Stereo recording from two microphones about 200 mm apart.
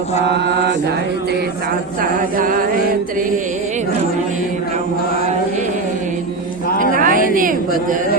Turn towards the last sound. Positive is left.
turn(degrees=-45)  # may be behind; listen again after turning